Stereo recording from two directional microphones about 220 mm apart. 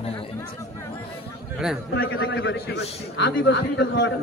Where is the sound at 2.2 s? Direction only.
55° left (ahead or behind).